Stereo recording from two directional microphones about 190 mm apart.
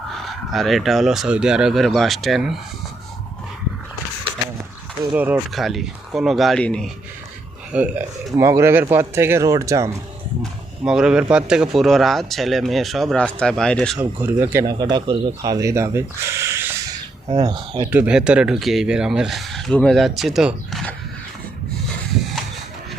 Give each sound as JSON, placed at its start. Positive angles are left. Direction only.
{"t": 0.1, "sound": "speech", "side_deg": 0}
{"t": 5.1, "sound": "speech", "side_deg": -10}
{"t": 7.7, "sound": "speech", "side_deg": -10}
{"t": 10.4, "sound": "speech", "side_deg": -5}
{"t": 14.0, "sound": "speech", "side_deg": -10}
{"t": 17.4, "sound": "speech", "side_deg": -25}
{"t": 17.9, "sound": "speech", "side_deg": -5}